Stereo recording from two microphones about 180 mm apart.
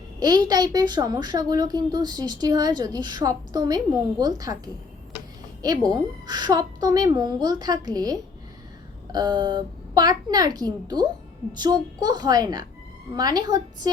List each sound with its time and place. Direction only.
0.2 s a woman's voice: 20° right (ahead or behind)